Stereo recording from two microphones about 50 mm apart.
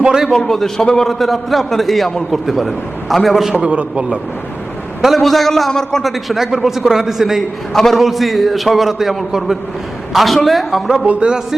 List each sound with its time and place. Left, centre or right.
0.3 s a man's voice: centre
1.0 s a man's voice: centre
3.5 s a man's voice: right
5.0 s a man's voice: centre
11.0 s a man's voice: right